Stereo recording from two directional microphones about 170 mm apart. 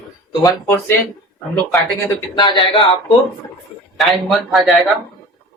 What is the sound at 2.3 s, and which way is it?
Speech, 30° left (ahead or behind).